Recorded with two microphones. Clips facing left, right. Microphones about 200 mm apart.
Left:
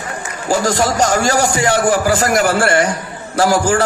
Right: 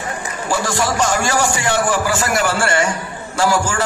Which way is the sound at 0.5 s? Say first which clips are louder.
Left 4 dB; 40° left (ahead or behind).